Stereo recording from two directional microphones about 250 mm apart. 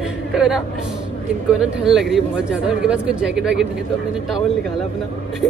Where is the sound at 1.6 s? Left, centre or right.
Centre.